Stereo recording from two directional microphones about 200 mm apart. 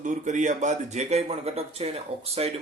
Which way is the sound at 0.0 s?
35° right (ahead or behind).